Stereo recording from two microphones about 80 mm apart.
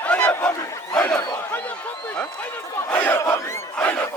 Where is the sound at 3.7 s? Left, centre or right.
Centre.